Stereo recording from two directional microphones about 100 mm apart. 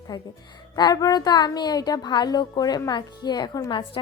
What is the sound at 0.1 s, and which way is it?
A woman's voice, 50° left (ahead or behind).